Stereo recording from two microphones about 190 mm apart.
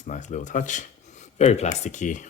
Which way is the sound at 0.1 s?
40° left (ahead or behind).